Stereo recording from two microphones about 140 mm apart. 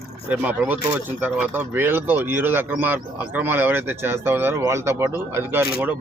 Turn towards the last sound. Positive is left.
turn(degrees=-15)  # may be behind; listen again after turning